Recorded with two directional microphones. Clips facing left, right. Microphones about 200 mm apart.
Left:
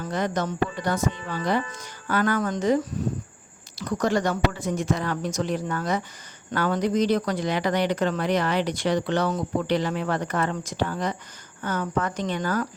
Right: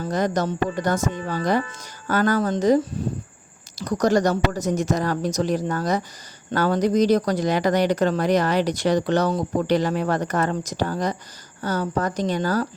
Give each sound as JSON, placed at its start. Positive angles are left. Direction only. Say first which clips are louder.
{"t": 0.0, "sound": "speech", "louder": "right 4 dB", "side_deg": -40}